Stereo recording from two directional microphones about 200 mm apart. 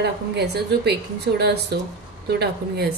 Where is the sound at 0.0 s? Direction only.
55° right (ahead or behind).